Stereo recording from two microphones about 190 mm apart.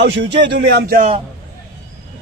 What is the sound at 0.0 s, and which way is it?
Speech, 65° right (ahead or behind).